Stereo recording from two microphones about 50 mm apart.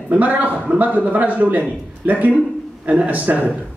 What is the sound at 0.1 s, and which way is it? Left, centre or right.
A man's voice, right.